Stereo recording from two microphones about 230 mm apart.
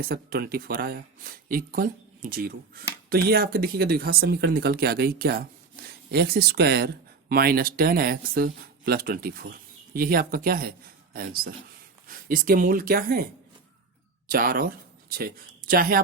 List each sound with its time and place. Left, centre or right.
0.0 s speech: right
14.3 s speech: right